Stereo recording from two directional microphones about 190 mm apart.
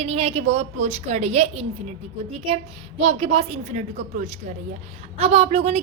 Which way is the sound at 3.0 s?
30° right (ahead or behind).